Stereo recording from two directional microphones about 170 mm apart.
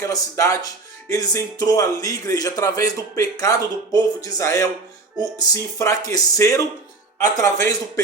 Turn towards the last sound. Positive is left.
turn(degrees=15)  # may be behind; listen again after turning